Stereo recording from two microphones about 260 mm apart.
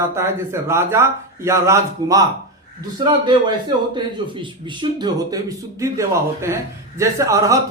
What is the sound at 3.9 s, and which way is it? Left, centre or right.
Speech, centre.